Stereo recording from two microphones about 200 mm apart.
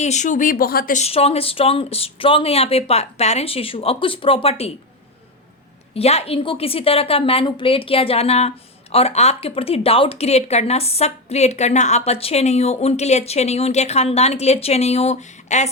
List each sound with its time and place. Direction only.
0.0 s speech: 35° left (ahead or behind)
5.9 s a woman's voice: 30° left (ahead or behind)